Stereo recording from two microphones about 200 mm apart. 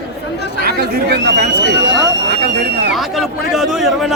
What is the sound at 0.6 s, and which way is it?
Speech, 55° right (ahead or behind).